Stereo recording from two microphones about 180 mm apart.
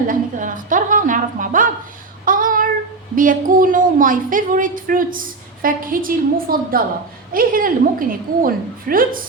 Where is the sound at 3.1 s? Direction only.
50° right (ahead or behind).